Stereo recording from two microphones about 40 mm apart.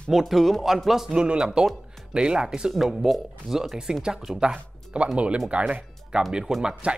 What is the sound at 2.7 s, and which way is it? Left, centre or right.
A man's voice, centre.